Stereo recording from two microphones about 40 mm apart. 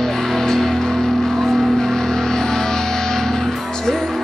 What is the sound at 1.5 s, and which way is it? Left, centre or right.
Vehicle, centre.